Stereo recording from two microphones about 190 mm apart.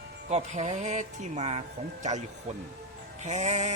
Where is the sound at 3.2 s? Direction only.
40° right (ahead or behind).